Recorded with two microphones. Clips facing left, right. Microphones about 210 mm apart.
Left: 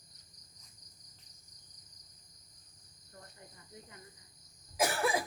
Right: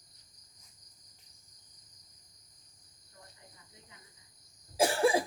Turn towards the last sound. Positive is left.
turn(degrees=-30)  # may be behind; listen again after turning